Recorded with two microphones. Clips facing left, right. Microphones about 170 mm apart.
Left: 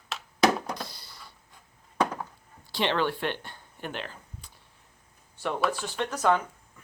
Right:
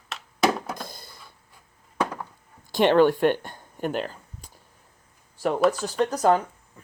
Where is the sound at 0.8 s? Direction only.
50° right (ahead or behind).